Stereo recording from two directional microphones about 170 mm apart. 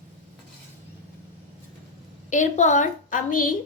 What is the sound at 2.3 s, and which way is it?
A woman's voice, 45° left (ahead or behind).